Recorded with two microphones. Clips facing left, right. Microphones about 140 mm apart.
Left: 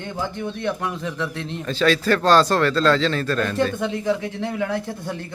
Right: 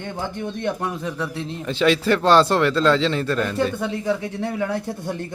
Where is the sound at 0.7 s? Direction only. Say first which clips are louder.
Right 1 dB; 15° right (ahead or behind).